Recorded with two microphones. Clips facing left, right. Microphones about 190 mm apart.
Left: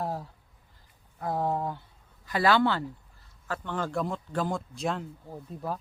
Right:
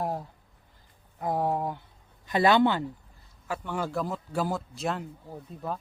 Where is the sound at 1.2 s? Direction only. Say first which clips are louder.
Right 1 dB; 15° right (ahead or behind).